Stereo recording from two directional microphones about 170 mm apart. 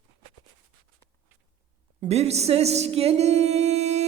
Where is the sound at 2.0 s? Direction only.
40° right (ahead or behind).